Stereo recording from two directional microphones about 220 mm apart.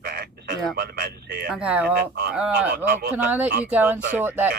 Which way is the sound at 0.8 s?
45° right (ahead or behind).